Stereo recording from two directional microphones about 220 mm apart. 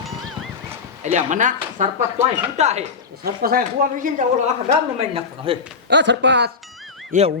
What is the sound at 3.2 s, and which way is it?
A woman's voice, 40° right (ahead or behind).